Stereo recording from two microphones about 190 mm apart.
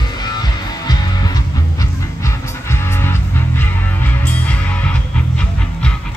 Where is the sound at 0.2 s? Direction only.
20° left (ahead or behind).